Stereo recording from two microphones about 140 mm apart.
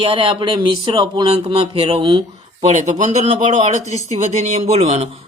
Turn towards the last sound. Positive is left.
turn(degrees=-50)  # may be behind; listen again after turning